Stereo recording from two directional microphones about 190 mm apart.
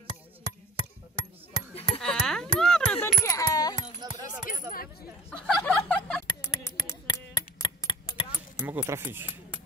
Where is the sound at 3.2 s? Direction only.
20° left (ahead or behind).